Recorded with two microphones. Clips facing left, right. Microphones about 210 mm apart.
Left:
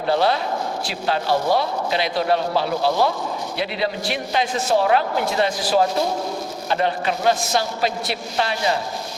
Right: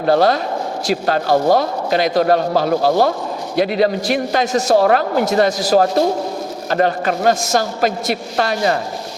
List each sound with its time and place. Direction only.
0.0 s a man's voice: 45° right (ahead or behind)